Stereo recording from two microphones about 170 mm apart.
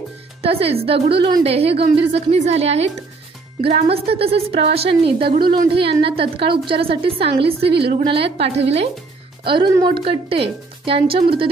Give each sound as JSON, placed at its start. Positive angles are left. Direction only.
{"t": 0.4, "sound": "a woman's voice", "side_deg": -35}